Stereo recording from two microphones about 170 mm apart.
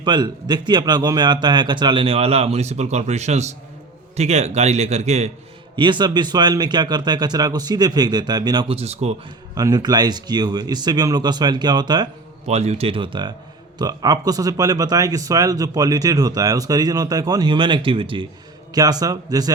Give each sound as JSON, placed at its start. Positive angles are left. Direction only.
{"t": 0.0, "sound": "speech", "side_deg": -25}
{"t": 5.7, "sound": "speech", "side_deg": -25}
{"t": 9.6, "sound": "speech", "side_deg": -20}
{"t": 12.5, "sound": "speech", "side_deg": -40}